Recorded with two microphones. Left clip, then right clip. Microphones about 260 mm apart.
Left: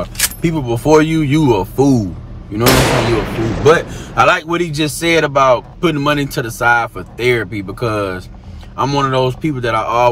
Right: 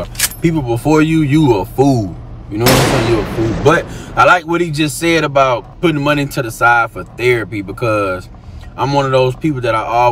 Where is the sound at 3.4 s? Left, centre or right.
Centre.